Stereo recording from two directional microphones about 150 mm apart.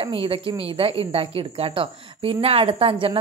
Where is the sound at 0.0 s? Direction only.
35° right (ahead or behind).